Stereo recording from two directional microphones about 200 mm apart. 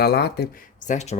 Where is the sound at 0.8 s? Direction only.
35° left (ahead or behind).